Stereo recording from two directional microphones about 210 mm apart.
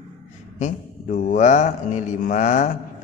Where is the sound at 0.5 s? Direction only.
35° left (ahead or behind).